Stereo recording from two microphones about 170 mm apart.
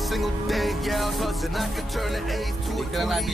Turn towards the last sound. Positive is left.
turn(degrees=0)  # may be behind; listen again after turning